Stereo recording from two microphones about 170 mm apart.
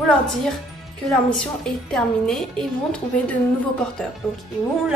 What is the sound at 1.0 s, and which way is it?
A woman's voice, 5° left (ahead or behind).